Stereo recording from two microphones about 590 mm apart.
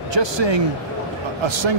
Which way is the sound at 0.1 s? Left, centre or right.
Right.